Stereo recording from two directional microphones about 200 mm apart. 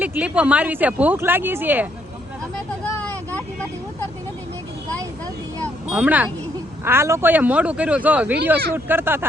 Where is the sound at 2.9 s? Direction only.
10° left (ahead or behind).